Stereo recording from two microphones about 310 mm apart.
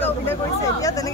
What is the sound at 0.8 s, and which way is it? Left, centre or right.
Speech, centre.